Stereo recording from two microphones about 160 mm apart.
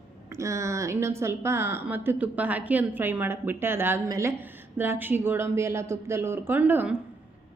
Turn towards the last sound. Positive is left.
turn(degrees=-10)  # may be behind; listen again after turning